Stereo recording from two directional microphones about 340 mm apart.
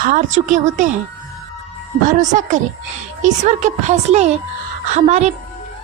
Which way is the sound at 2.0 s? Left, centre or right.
Right.